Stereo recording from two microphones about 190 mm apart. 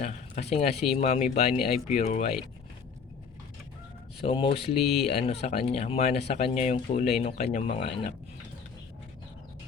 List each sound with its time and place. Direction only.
0.0 s speech: 35° left (ahead or behind)
4.3 s speech: 30° left (ahead or behind)